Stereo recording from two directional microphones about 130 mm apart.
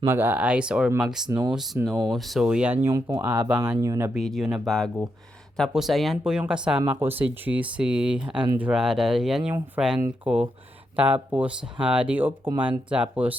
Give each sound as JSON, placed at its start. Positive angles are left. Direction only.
{"t": 0.0, "sound": "speech", "side_deg": -15}
{"t": 2.8, "sound": "speech", "side_deg": -25}
{"t": 4.1, "sound": "speech", "side_deg": 0}